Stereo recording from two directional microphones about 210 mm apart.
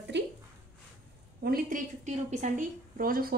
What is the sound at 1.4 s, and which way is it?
A woman's voice, 45° right (ahead or behind).